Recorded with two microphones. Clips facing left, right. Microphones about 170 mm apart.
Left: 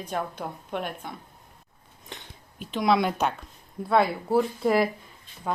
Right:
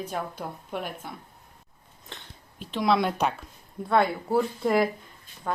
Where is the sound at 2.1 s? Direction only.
15° left (ahead or behind).